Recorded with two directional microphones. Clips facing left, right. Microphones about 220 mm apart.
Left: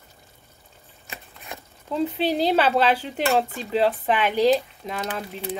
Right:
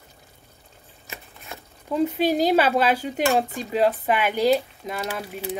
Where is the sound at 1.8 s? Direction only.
10° right (ahead or behind).